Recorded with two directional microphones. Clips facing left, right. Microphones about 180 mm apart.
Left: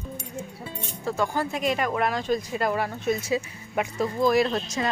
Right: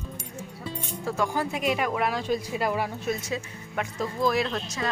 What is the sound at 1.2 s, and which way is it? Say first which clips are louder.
Speech: left 1 dB; 10° right (ahead or behind).